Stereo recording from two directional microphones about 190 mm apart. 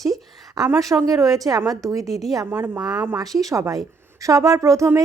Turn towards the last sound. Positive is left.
turn(degrees=-15)  # may be behind; listen again after turning